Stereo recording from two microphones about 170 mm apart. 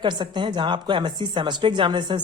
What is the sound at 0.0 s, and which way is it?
Speech, 25° right (ahead or behind).